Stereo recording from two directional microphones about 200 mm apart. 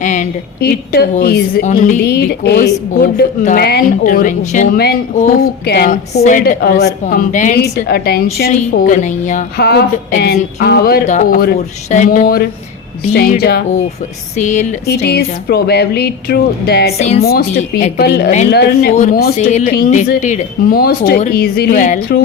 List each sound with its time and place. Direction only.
0.0 s a sound: 40° left (ahead or behind)
1.2 s a woman's voice: 50° left (ahead or behind)
1.6 s a woman's voice: 40° left (ahead or behind)
7.0 s a woman's voice: 40° left (ahead or behind)
8.4 s a woman's voice: 40° left (ahead or behind)
9.6 s a woman's voice: 55° left (ahead or behind)
14.3 s a woman's voice: 35° left (ahead or behind)
14.8 s a woman's voice: 55° left (ahead or behind)
18.9 s a woman's voice: 35° left (ahead or behind)